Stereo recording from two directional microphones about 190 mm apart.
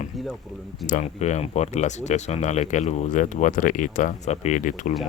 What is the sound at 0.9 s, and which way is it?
Speech, 40° left (ahead or behind).